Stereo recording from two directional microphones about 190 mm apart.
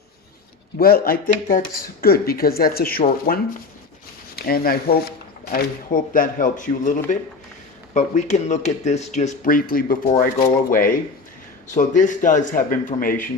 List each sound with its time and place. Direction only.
0.8 s speech: 50° left (ahead or behind)